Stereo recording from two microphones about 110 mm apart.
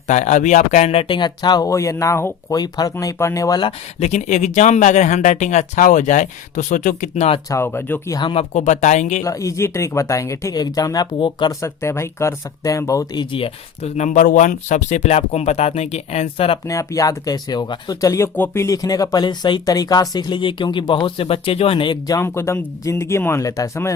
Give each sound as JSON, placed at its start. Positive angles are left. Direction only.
{"t": 0.1, "sound": "speech", "side_deg": 90}
{"t": 2.5, "sound": "speech", "side_deg": 35}
{"t": 4.0, "sound": "speech", "side_deg": 90}
{"t": 7.5, "sound": "speech", "side_deg": 20}
{"t": 8.1, "sound": "speech", "side_deg": 45}
{"t": 8.4, "sound": "speech", "side_deg": 90}
{"t": 9.2, "sound": "speech", "side_deg": 30}
{"t": 11.2, "sound": "speech", "side_deg": 45}
{"t": 11.6, "sound": "speech", "side_deg": 25}
{"t": 13.3, "sound": "speech", "side_deg": 65}
{"t": 16.6, "sound": "speech", "side_deg": 30}
{"t": 18.3, "sound": "speech", "side_deg": 20}
{"t": 22.2, "sound": "speech", "side_deg": 20}